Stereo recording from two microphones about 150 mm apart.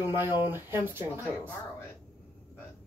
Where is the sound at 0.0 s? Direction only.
15° right (ahead or behind).